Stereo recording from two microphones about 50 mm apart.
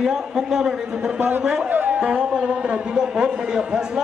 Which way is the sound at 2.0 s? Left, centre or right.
Centre.